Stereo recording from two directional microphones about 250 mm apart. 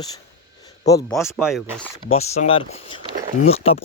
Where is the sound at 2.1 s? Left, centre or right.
Left.